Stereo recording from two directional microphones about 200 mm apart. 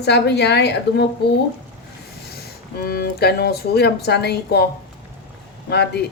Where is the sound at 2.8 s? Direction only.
50° left (ahead or behind).